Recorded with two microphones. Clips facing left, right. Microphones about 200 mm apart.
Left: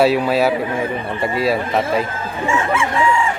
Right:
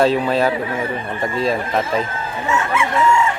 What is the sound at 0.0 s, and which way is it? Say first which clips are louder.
A man's voice: left 1 dB; 10° left (ahead or behind).